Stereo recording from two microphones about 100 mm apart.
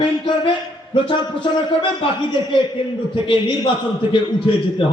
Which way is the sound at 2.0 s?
55° left (ahead or behind).